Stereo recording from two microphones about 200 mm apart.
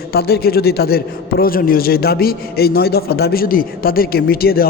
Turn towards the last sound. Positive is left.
turn(degrees=50)  # may be behind; listen again after turning